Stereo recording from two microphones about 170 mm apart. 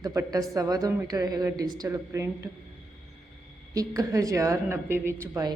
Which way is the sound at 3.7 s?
20° right (ahead or behind).